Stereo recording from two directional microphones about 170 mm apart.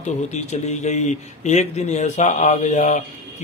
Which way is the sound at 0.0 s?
40° left (ahead or behind).